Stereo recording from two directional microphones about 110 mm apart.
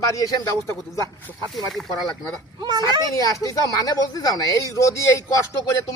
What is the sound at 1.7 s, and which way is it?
Speech, 5° left (ahead or behind).